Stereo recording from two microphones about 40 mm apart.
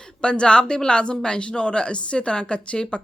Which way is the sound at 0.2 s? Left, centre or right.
Left.